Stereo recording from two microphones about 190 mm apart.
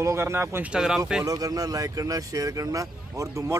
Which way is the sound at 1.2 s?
20° right (ahead or behind).